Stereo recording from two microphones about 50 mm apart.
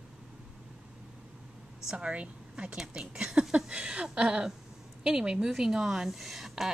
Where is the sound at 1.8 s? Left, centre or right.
Centre.